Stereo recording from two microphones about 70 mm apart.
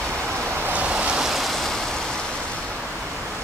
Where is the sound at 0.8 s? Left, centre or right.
Centre.